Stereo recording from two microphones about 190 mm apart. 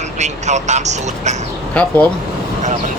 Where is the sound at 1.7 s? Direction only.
5° left (ahead or behind).